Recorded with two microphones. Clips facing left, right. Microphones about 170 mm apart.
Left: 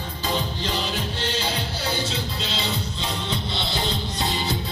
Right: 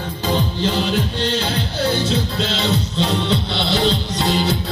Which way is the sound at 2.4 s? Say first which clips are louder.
Right 8 dB; 75° right (ahead or behind).